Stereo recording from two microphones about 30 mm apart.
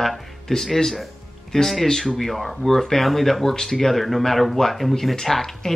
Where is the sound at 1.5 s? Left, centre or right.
Left.